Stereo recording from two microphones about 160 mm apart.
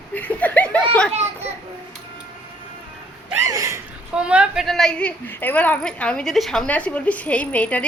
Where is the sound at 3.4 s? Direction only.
20° right (ahead or behind).